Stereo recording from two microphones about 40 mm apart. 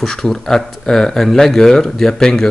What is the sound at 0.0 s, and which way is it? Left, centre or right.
Speech, centre.